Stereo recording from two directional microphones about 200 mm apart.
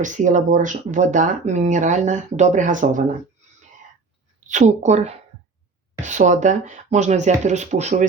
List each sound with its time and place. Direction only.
0.0 s speech: 40° right (ahead or behind)
4.4 s speech: 35° right (ahead or behind)